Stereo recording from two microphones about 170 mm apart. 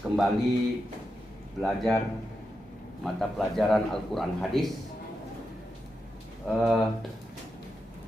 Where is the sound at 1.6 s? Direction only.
Centre (ahead or behind).